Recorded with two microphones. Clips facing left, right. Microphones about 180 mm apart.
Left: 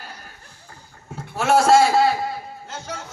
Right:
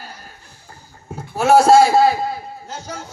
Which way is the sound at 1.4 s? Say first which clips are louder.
Right 4 dB; 35° right (ahead or behind).